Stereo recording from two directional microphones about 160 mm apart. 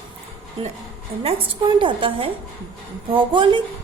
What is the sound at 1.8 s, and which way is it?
A woman's voice, 35° right (ahead or behind).